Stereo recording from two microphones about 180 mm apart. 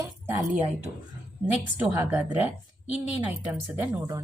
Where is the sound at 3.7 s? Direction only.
15° right (ahead or behind).